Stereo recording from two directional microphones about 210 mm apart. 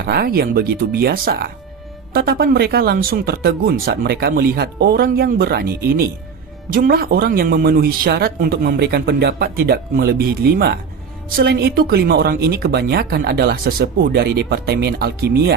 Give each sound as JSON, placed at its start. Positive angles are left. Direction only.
{"t": 0.0, "sound": "speech", "side_deg": -50}